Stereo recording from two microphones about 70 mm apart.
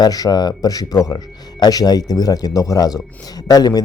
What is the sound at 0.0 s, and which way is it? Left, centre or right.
Speech, left.